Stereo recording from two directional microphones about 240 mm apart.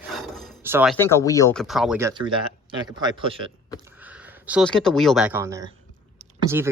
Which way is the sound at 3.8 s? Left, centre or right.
Centre.